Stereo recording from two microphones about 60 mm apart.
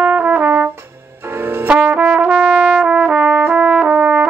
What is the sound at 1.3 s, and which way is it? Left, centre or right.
Brass instrument, right.